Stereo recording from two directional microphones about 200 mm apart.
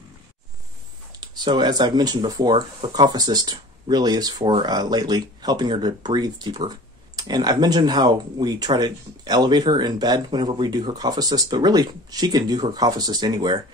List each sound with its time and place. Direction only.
1.1 s speech: 20° right (ahead or behind)